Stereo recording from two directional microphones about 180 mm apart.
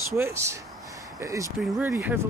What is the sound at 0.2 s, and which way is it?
Speech, 15° right (ahead or behind).